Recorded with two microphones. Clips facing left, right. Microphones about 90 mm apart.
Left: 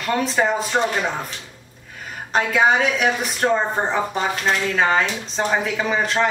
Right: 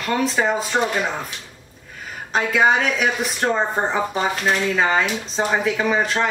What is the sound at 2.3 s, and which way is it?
Speech, centre (ahead or behind).